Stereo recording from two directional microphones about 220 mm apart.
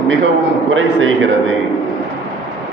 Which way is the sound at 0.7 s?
60° right (ahead or behind).